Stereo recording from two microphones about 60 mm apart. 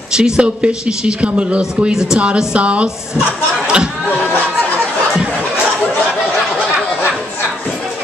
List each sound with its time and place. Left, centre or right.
0.1 s speech: centre
3.6 s chatter: centre